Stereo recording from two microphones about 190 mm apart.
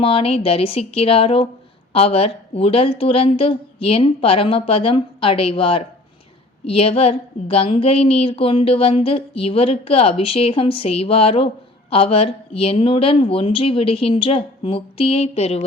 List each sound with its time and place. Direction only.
0.0 s a woman's voice: 30° left (ahead or behind)